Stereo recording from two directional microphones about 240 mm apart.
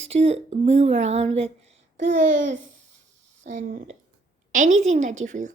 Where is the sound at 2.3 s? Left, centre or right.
Right.